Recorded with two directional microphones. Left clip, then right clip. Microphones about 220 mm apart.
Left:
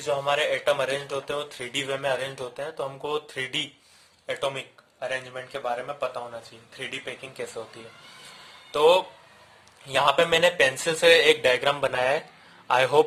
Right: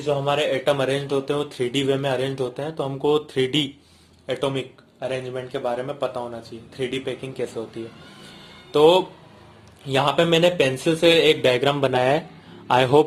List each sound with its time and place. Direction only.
0.0 s speech: 35° left (ahead or behind)
8.7 s speech: 25° left (ahead or behind)